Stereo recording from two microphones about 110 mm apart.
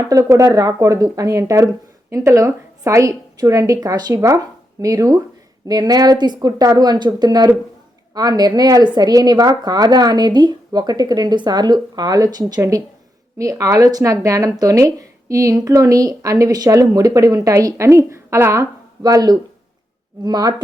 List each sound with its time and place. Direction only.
0.1 s a woman's voice: 30° right (ahead or behind)
19.0 s a woman's voice: 35° right (ahead or behind)